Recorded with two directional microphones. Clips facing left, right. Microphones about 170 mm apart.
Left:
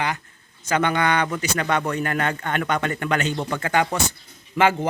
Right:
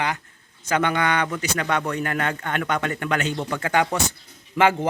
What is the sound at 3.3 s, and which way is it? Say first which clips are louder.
Speech: left 1 dB; 20° left (ahead or behind).